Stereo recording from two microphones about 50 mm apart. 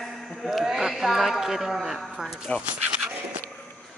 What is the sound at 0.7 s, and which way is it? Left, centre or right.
Speech, centre.